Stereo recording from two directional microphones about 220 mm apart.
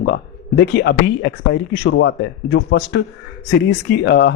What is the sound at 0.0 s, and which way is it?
A man's voice, 50° left (ahead or behind).